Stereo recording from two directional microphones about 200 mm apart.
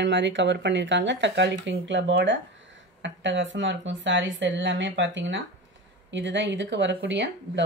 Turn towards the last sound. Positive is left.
turn(degrees=-65)  # may be behind; listen again after turning